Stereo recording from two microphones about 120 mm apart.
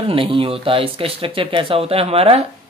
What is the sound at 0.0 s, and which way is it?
Speech, 50° right (ahead or behind).